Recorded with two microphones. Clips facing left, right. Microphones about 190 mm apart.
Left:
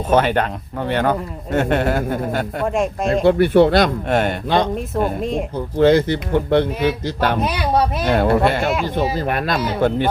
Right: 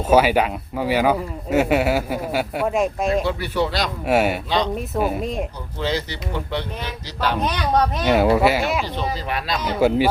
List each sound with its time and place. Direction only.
0.1 s a man's voice: 5° right (ahead or behind)
3.2 s speech: 55° left (ahead or behind)
4.1 s a man's voice: 5° right (ahead or behind)
4.4 s speech: 50° left (ahead or behind)
4.9 s speech: 5° right (ahead or behind)
5.7 s speech: 55° left (ahead or behind)
7.3 s speech: 10° left (ahead or behind)
8.0 s speech: 5° right (ahead or behind)
8.8 s speech: 50° left (ahead or behind)
9.6 s speech: 10° left (ahead or behind)